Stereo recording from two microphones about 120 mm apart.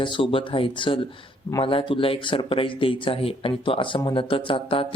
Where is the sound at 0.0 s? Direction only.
45° left (ahead or behind).